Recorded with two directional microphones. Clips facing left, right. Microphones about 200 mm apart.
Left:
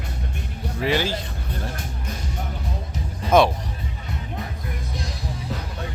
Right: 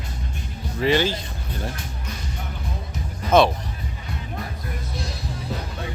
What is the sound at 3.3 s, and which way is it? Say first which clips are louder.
Speech: even; 15° left (ahead or behind).